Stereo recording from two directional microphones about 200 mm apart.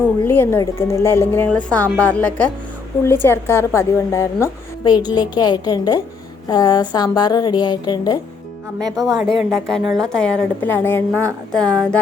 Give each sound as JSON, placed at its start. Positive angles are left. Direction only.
{"t": 0.3, "sound": "a woman's voice", "side_deg": 10}
{"t": 9.0, "sound": "a woman's voice", "side_deg": 0}